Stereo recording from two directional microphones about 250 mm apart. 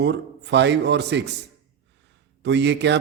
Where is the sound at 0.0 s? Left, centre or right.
Right.